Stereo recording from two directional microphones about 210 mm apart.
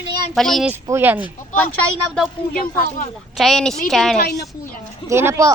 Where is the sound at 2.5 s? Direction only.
40° left (ahead or behind).